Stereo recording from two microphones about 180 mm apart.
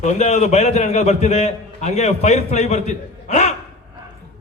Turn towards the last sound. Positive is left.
turn(degrees=40)  # may be behind; listen again after turning